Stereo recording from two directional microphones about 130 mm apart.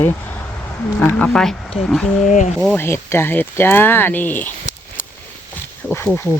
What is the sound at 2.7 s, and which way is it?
Speech, 20° left (ahead or behind).